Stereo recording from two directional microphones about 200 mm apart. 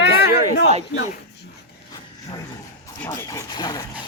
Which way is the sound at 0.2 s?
60° left (ahead or behind).